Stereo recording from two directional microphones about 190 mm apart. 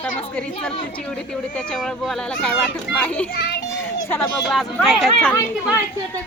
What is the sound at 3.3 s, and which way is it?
Speech, 60° left (ahead or behind).